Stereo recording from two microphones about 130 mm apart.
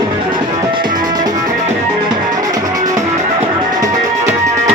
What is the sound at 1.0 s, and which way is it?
Music, 30° right (ahead or behind).